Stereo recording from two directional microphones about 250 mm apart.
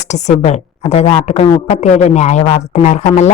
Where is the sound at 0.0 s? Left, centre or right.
Left.